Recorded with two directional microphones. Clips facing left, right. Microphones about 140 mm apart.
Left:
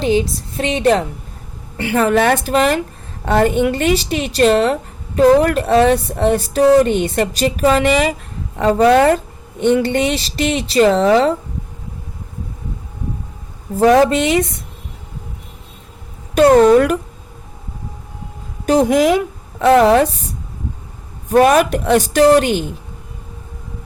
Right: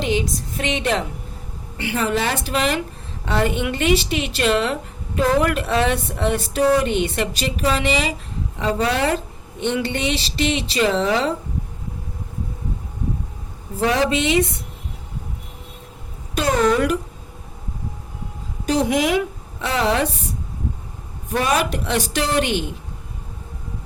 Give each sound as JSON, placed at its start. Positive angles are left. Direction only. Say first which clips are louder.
{"t": 0.0, "sound": "speech", "louder": "left 6 dB", "side_deg": 35}
{"t": 1.8, "sound": "a woman's voice", "louder": "left 7 dB", "side_deg": 50}
{"t": 13.7, "sound": "a woman's voice", "louder": "left 8 dB", "side_deg": 45}
{"t": 16.3, "sound": "a woman's voice", "louder": "left 10 dB", "side_deg": 55}
{"t": 18.6, "sound": "a woman's voice", "louder": "left 6 dB", "side_deg": 50}
{"t": 21.3, "sound": "a woman's voice", "louder": "left 9 dB", "side_deg": 50}